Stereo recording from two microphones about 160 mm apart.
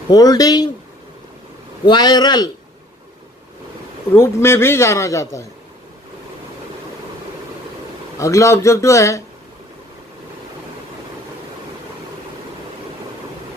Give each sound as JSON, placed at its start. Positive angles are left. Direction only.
{"t": 0.1, "sound": "a man's voice", "side_deg": 25}
{"t": 1.9, "sound": "a man's voice", "side_deg": 25}
{"t": 4.1, "sound": "a man's voice", "side_deg": 15}
{"t": 8.2, "sound": "a man's voice", "side_deg": 20}